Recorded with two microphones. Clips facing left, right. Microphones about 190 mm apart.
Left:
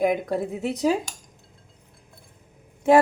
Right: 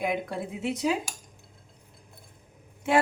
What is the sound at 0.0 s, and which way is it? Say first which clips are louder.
Speech: left 7 dB; 40° left (ahead or behind).